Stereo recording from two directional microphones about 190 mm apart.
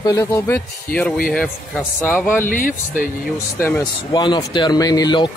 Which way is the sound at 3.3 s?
15° left (ahead or behind).